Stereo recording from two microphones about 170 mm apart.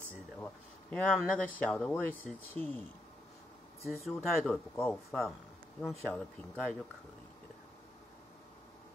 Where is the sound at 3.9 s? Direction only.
Centre (ahead or behind).